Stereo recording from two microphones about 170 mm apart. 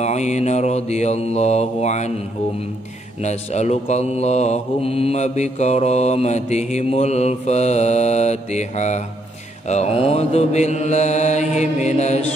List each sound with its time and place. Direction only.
0.0 s mantra: 40° left (ahead or behind)
3.2 s mantra: 40° left (ahead or behind)